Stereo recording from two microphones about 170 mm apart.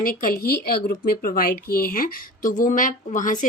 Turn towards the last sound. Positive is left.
turn(degrees=50)  # may be behind; listen again after turning